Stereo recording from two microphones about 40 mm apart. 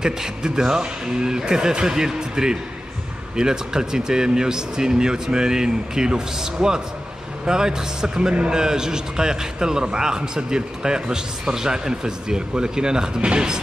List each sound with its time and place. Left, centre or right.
0.0 s a man's voice: centre